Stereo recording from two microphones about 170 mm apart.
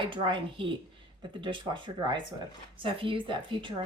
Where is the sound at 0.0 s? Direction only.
30° right (ahead or behind).